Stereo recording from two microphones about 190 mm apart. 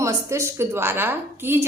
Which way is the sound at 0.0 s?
15° right (ahead or behind).